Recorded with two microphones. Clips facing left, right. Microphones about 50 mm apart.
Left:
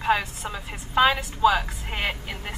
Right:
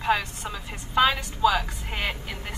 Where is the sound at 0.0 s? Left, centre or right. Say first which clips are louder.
Left 1 dB; centre.